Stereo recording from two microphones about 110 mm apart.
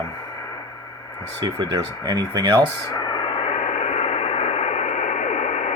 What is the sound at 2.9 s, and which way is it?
Radio, 40° left (ahead or behind).